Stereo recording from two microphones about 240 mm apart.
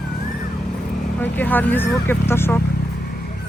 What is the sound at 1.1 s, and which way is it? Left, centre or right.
Speech, centre.